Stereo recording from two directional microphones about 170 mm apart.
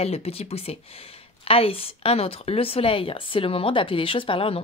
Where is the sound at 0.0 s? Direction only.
35° left (ahead or behind).